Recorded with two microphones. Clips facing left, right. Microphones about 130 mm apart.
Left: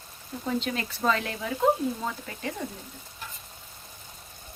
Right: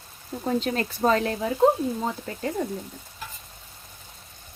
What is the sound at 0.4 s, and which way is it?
Speech, 40° right (ahead or behind).